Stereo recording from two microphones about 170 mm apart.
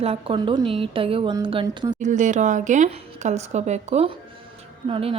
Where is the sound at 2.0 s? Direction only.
45° right (ahead or behind).